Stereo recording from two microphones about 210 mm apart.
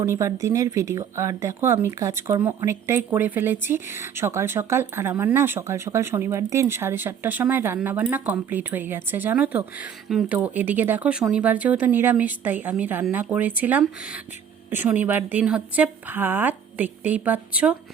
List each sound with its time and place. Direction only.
0.0 s speech: 15° right (ahead or behind)